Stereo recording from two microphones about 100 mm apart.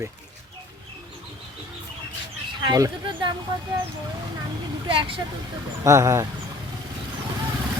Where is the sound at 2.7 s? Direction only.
35° right (ahead or behind).